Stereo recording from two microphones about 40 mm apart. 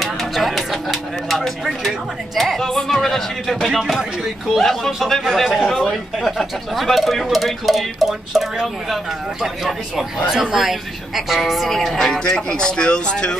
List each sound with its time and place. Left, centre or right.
0.0 s a sound: centre
2.3 s speech: centre
11.7 s speech: centre; by 13.4 s left